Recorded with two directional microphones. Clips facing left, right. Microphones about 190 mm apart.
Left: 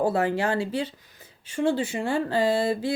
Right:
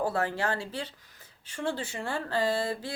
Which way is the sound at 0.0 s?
15° left (ahead or behind).